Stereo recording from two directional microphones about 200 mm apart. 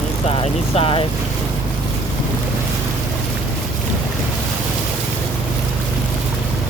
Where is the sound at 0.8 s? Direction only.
25° left (ahead or behind).